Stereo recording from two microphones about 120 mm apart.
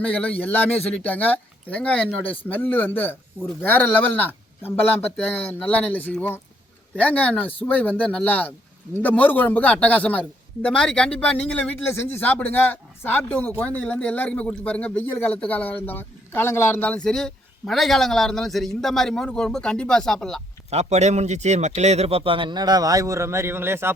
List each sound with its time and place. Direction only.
0.0 s speech: 10° left (ahead or behind)
20.7 s a man's voice: 65° right (ahead or behind); by 23.9 s 20° right (ahead or behind)